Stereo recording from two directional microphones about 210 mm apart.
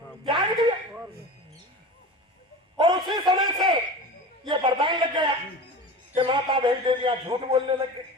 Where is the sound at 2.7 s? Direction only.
20° right (ahead or behind).